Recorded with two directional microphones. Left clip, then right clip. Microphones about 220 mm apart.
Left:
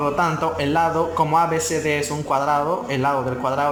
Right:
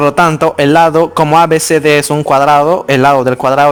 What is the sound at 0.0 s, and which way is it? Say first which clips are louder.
A man's voice: right 11 dB; 50° right (ahead or behind).